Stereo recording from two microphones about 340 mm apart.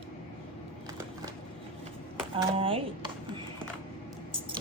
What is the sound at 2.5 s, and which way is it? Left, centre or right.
Speech, centre.